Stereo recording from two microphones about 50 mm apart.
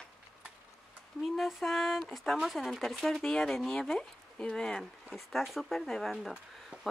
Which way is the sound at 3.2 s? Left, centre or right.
Centre.